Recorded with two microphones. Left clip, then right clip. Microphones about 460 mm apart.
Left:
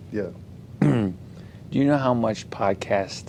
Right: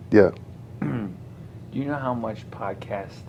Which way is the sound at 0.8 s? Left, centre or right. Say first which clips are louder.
Left 8 dB; left.